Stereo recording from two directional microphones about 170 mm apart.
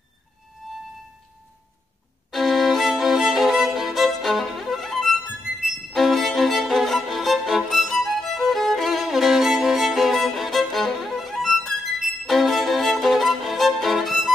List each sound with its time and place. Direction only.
2.3 s music: centre (ahead or behind)